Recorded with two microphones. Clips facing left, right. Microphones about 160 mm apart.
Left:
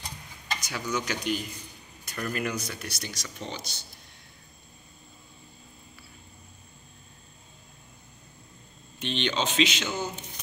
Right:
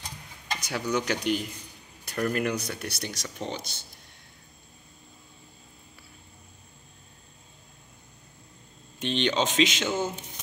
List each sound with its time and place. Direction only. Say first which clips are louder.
0.6 s stir: right 4 dB; 60° right (ahead or behind)
0.9 s speech: right 3 dB; 60° right (ahead or behind)
9.0 s speech: right 3 dB; 40° right (ahead or behind)
9.8 s speech: right 4 dB; 25° right (ahead or behind)